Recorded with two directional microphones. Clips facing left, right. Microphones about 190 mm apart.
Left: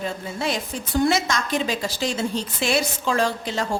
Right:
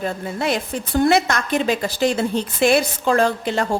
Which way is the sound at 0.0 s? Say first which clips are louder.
Right 4 dB; 60° right (ahead or behind).